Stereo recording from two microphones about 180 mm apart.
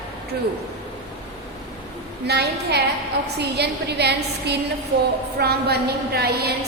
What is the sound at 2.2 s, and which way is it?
A woman's voice, 65° right (ahead or behind).